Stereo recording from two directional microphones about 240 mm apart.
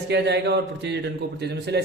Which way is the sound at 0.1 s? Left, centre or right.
Right.